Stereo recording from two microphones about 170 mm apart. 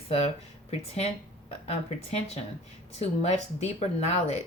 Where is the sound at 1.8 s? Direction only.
40° left (ahead or behind).